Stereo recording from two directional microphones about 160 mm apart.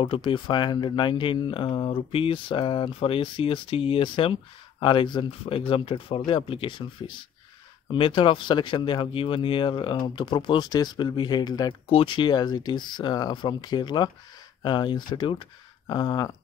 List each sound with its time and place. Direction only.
0.0 s speech: 35° left (ahead or behind)